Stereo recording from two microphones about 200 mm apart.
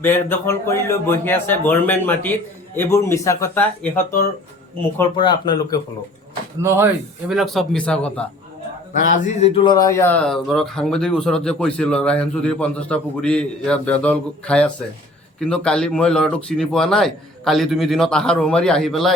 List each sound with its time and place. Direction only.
0.0 s speech: 10° left (ahead or behind)
5.1 s speech: 25° left (ahead or behind)
6.6 s speech: 10° right (ahead or behind); by 8.3 s 5° left (ahead or behind)
8.9 s speech: 40° left (ahead or behind)
9.6 s speech: 20° left (ahead or behind); by 19.1 s centre (ahead or behind)